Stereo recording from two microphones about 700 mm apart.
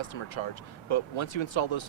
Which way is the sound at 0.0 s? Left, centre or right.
Left.